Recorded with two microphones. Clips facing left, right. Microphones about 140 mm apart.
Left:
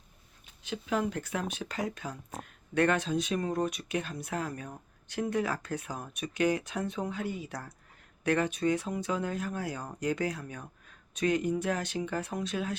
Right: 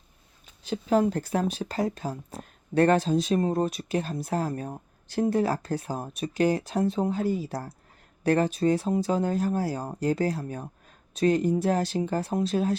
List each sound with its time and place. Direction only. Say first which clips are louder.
0.6 s speech: right 8 dB; 35° right (ahead or behind)